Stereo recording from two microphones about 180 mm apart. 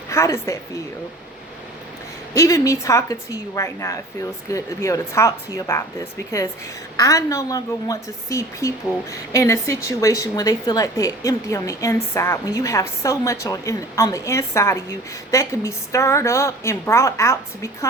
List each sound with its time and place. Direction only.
0.1 s a woman's voice: 15° left (ahead or behind)
2.3 s a woman's voice: 15° left (ahead or behind)
7.0 s a woman's voice: 20° left (ahead or behind)